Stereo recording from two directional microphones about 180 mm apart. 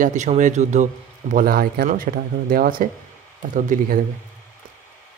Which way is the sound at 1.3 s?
55° right (ahead or behind).